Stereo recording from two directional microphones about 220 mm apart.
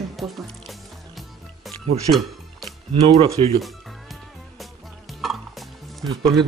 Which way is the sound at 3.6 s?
Centre (ahead or behind).